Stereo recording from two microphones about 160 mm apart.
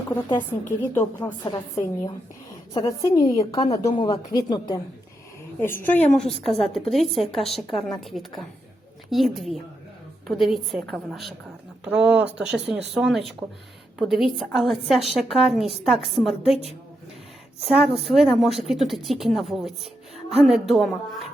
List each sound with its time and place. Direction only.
0.3 s a woman's voice: 15° left (ahead or behind)
2.8 s speech: 30° left (ahead or behind)
5.5 s a woman's voice: 15° left (ahead or behind)
6.7 s a woman's voice: centre (ahead or behind)
17.7 s a woman's voice: centre (ahead or behind)